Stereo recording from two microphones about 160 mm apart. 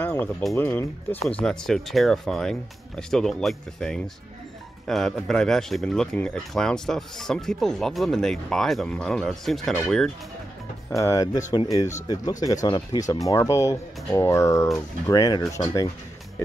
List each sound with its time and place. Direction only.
0.0 s music: 10° left (ahead or behind)
0.6 s speech: 10° left (ahead or behind)
11.0 s speech: 20° left (ahead or behind)